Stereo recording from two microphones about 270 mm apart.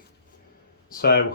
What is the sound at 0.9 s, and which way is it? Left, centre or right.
Speech, left.